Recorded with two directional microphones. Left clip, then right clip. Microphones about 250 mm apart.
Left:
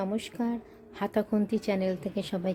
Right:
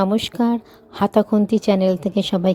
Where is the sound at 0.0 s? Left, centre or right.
Right.